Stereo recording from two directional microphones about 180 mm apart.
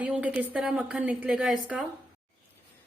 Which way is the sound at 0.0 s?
5° right (ahead or behind).